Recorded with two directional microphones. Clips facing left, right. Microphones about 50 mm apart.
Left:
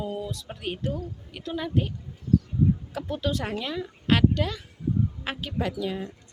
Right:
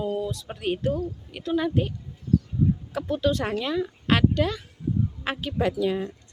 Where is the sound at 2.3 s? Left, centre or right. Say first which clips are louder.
Even; centre.